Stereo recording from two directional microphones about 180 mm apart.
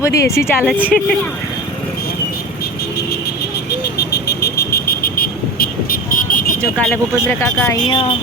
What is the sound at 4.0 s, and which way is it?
Vehicle, 65° left (ahead or behind).